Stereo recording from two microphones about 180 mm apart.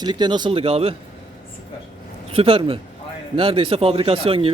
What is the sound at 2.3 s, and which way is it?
Speech, 30° right (ahead or behind).